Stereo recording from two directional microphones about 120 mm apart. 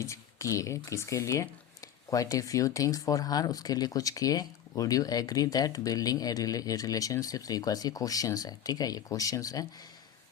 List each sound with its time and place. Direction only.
0.0 s speech: 25° left (ahead or behind)